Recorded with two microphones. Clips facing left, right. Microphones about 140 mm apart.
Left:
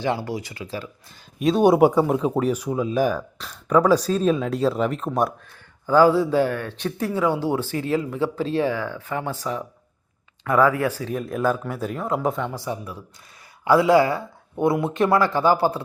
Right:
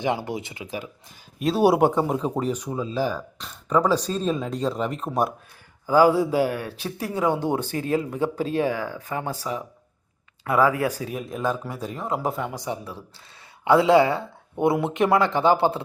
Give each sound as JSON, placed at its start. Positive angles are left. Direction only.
{"t": 0.0, "sound": "speech", "side_deg": -20}
{"t": 1.4, "sound": "speech", "side_deg": 0}
{"t": 1.8, "sound": "speech", "side_deg": 10}
{"t": 3.3, "sound": "a sound", "side_deg": 0}
{"t": 3.8, "sound": "speech", "side_deg": 10}
{"t": 5.8, "sound": "speech", "side_deg": -10}
{"t": 11.3, "sound": "speech", "side_deg": 0}
{"t": 12.5, "sound": "speech", "side_deg": -20}